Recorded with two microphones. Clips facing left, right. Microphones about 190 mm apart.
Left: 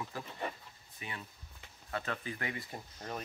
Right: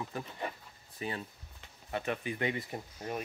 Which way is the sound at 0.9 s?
35° right (ahead or behind).